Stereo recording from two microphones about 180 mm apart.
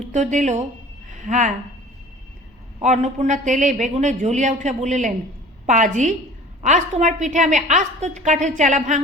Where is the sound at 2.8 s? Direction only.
40° right (ahead or behind).